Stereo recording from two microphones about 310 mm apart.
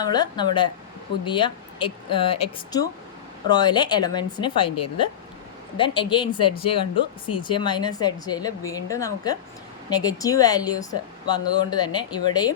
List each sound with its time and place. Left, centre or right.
0.0 s speech: centre
5.7 s speech: centre